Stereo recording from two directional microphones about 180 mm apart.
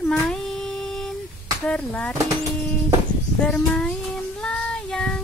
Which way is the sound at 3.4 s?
5° left (ahead or behind).